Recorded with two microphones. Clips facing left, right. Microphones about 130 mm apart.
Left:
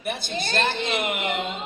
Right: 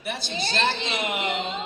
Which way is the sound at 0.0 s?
50° left (ahead or behind).